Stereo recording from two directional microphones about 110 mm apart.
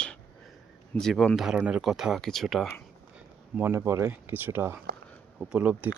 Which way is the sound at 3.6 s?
25° right (ahead or behind).